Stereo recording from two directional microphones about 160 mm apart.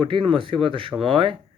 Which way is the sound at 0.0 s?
35° right (ahead or behind).